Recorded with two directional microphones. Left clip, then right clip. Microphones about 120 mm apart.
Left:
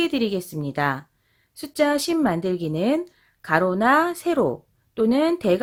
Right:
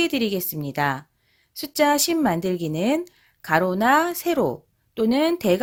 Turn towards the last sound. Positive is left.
turn(degrees=-30)  # may be behind; listen again after turning